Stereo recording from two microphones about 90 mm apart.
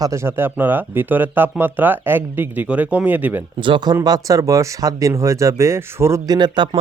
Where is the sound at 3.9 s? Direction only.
45° right (ahead or behind); by 6.2 s 30° right (ahead or behind).